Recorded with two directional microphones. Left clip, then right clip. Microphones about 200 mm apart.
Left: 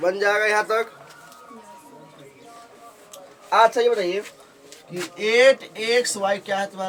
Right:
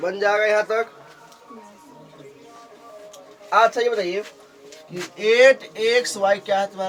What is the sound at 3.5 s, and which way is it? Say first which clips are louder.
Speech: left 1 dB; 30° left (ahead or behind).